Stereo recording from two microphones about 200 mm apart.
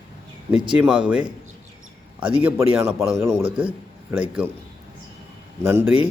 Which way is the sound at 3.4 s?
25° right (ahead or behind).